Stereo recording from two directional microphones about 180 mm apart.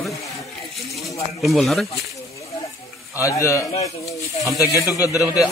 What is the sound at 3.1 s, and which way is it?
Speech, 20° left (ahead or behind).